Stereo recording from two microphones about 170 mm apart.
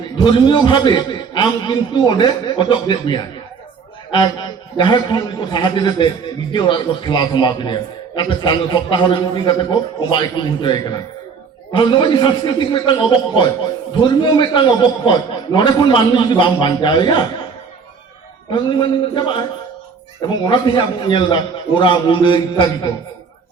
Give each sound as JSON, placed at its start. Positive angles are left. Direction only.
{"t": 0.2, "sound": "a man's voice", "side_deg": 25}
{"t": 18.5, "sound": "a man's voice", "side_deg": 30}